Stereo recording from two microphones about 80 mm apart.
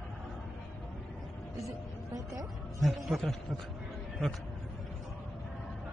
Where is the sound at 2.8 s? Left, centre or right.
Centre.